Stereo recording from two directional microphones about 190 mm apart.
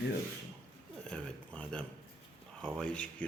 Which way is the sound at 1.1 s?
5° left (ahead or behind).